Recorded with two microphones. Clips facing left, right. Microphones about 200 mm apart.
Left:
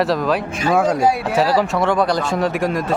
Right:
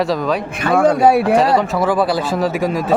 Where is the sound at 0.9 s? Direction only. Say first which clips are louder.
Right 5 dB; 60° right (ahead or behind).